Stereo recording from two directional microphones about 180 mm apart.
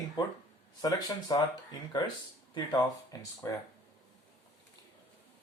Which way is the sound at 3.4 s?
20° left (ahead or behind).